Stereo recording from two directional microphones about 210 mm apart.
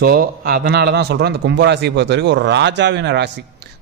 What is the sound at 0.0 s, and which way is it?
A man's voice, 45° right (ahead or behind).